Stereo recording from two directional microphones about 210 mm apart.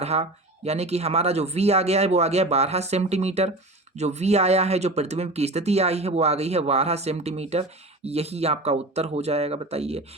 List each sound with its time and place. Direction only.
0.0 s speech: 30° right (ahead or behind)